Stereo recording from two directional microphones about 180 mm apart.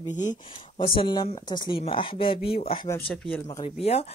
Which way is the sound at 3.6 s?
35° left (ahead or behind).